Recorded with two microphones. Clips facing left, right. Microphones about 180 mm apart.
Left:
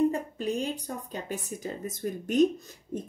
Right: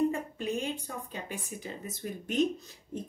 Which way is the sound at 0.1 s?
35° left (ahead or behind).